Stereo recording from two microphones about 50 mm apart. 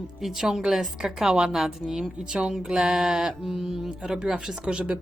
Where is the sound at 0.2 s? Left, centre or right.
Centre.